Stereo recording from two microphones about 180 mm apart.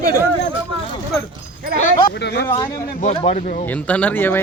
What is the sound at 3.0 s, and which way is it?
Speech, 35° left (ahead or behind).